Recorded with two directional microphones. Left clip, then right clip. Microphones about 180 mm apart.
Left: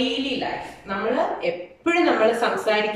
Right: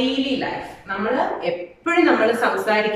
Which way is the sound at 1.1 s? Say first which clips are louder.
Right 1 dB; 15° left (ahead or behind).